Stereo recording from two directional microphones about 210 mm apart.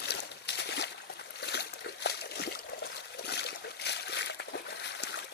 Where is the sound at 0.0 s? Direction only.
55° left (ahead or behind).